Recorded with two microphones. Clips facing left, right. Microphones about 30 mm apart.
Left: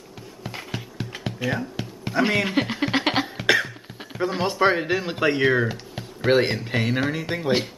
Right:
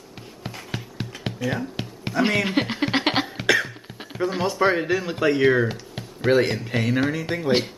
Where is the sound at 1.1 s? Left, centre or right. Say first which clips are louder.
Even; left.